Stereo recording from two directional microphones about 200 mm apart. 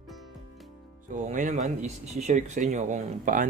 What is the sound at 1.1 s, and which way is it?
Speech, 40° right (ahead or behind).